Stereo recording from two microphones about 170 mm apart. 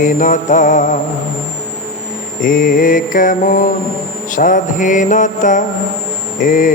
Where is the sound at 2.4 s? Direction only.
50° left (ahead or behind).